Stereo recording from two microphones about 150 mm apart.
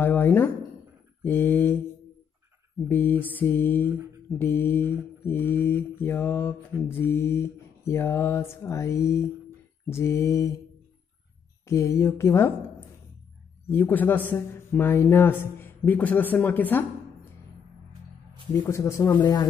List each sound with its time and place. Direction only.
0.0 s a man's voice: 15° left (ahead or behind)
2.9 s a man's voice: 15° left (ahead or behind)
11.6 s speech: 20° left (ahead or behind)
13.7 s a man's voice: 15° left (ahead or behind)
18.5 s speech: 20° left (ahead or behind)